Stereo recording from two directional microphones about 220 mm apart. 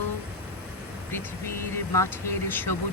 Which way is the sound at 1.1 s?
10° left (ahead or behind).